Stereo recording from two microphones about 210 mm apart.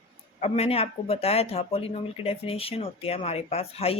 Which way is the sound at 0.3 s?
30° left (ahead or behind).